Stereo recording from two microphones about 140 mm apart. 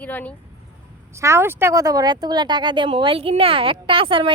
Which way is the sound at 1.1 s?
20° right (ahead or behind).